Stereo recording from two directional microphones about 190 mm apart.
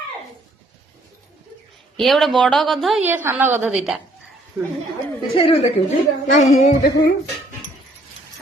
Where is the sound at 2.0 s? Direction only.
Centre (ahead or behind).